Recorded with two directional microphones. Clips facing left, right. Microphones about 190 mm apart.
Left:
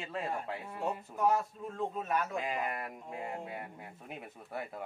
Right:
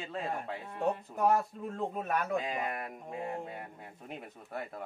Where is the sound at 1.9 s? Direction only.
60° right (ahead or behind).